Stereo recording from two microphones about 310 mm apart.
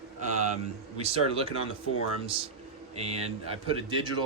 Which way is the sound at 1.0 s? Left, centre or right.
Centre.